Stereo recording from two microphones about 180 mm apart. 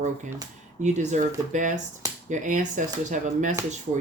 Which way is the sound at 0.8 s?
40° right (ahead or behind).